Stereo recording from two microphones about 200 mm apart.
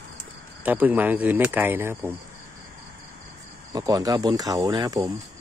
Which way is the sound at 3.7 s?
20° right (ahead or behind).